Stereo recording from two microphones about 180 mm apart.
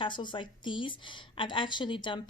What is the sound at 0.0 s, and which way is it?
Speech, 25° left (ahead or behind).